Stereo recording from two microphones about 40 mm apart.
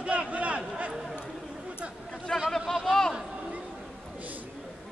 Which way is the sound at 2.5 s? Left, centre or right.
Centre.